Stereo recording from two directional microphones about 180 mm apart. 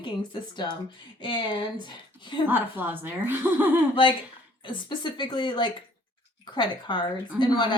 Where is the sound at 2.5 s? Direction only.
10° right (ahead or behind).